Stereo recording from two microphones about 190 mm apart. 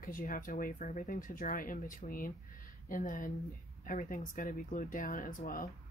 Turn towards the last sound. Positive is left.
turn(degrees=45)  # may be behind; listen again after turning